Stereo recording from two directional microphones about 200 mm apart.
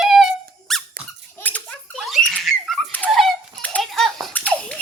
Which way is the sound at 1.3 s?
10° left (ahead or behind).